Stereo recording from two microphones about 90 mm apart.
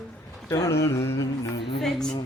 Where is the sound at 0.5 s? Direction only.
30° left (ahead or behind).